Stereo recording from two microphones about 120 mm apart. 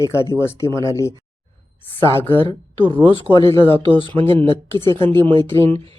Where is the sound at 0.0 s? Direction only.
25° left (ahead or behind).